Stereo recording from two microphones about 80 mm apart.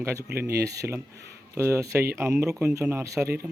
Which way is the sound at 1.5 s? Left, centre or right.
Right.